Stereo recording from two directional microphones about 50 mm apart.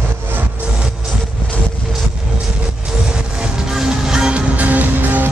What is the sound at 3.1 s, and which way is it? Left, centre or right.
Music, centre.